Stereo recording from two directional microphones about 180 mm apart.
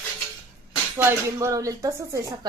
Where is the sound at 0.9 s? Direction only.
15° right (ahead or behind).